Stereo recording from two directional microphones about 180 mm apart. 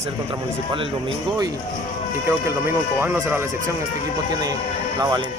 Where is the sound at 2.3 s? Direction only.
15° right (ahead or behind).